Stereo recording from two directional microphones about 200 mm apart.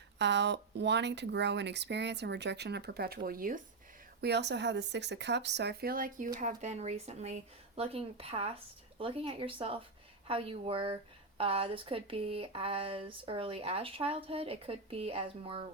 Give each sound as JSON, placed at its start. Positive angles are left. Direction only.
{"t": 0.2, "sound": "speech", "side_deg": -60}
{"t": 4.2, "sound": "a woman's voice", "side_deg": -55}